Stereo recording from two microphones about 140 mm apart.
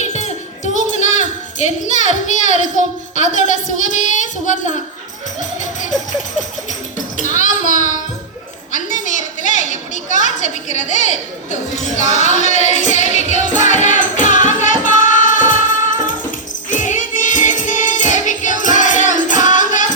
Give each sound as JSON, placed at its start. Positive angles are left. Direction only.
{"t": 0.0, "sound": "speech", "side_deg": 55}
{"t": 5.4, "sound": "music", "side_deg": 60}
{"t": 7.2, "sound": "music", "side_deg": 60}
{"t": 8.7, "sound": "a sound", "side_deg": 60}
{"t": 16.6, "sound": "music", "side_deg": 65}